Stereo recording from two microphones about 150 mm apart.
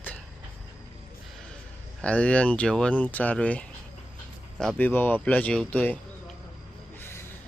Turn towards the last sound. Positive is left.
turn(degrees=15)  # may be behind; listen again after turning